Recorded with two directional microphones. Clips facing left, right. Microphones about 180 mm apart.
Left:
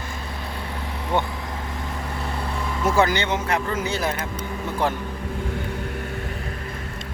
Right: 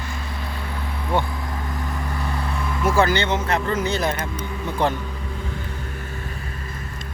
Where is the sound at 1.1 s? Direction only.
20° left (ahead or behind).